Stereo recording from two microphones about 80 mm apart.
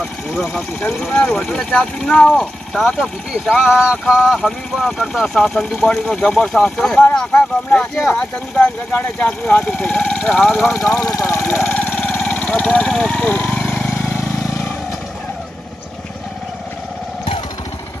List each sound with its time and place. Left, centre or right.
0.3 s speech: centre
1.1 s speech: left
1.4 s speech: centre
10.8 s speech: left
11.7 s vehicle: centre
12.3 s speech: centre
13.6 s vehicle: centre